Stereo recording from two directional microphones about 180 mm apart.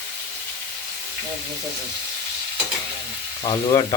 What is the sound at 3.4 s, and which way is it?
Frying, 25° left (ahead or behind).